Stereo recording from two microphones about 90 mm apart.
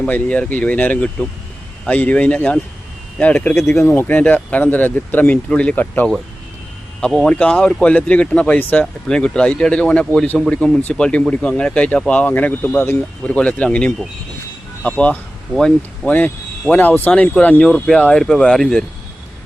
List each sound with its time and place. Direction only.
0.0 s speech: 15° left (ahead or behind)
3.5 s speech: 30° left (ahead or behind)
7.1 s speech: 10° left (ahead or behind)